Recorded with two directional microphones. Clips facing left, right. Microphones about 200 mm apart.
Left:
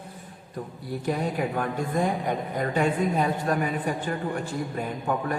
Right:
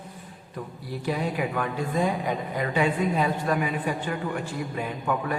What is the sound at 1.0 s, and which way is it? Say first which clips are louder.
A woman's voice: even; 45° left (ahead or behind).